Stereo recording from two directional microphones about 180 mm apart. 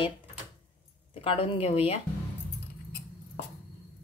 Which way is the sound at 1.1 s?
30° left (ahead or behind).